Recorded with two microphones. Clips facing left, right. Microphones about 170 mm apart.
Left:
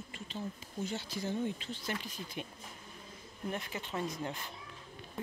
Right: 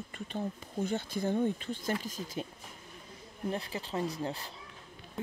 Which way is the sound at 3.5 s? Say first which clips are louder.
Right 3 dB; 30° right (ahead or behind).